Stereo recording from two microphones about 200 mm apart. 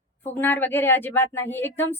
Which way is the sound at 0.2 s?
10° left (ahead or behind).